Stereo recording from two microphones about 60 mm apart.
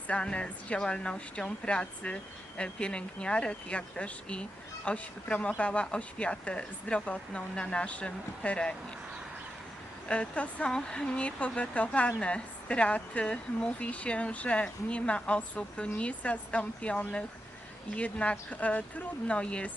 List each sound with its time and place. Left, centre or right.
0.1 s a woman's voice: centre
10.1 s a woman's voice: left